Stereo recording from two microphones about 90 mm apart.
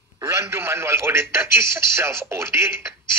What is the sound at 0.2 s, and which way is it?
Speech, 25° right (ahead or behind).